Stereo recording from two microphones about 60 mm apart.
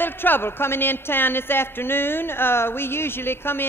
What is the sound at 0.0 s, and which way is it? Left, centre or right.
Speech, left.